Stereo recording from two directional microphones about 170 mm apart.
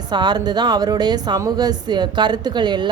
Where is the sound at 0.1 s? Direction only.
25° right (ahead or behind).